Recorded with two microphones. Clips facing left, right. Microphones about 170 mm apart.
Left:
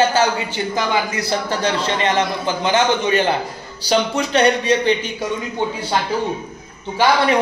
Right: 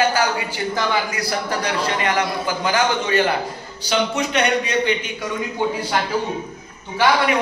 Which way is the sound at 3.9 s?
35° left (ahead or behind).